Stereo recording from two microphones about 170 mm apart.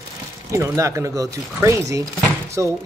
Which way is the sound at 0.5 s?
15° right (ahead or behind).